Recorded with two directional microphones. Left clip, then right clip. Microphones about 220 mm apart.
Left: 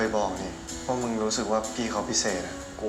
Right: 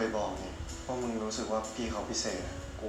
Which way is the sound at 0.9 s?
45° left (ahead or behind).